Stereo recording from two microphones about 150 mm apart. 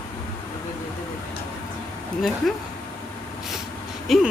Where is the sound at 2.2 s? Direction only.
Centre (ahead or behind).